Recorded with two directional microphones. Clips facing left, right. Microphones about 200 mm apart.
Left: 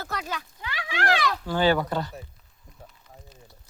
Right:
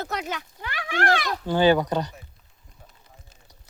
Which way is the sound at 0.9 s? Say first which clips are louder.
Right 1 dB; 50° right (ahead or behind).